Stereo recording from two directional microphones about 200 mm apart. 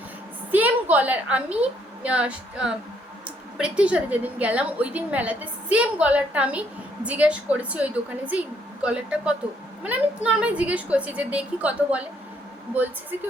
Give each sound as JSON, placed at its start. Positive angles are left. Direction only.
{"t": 0.5, "sound": "a woman's voice", "side_deg": -10}